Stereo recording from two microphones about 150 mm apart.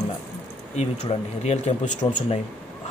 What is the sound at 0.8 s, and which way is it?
Speech, 45° left (ahead or behind).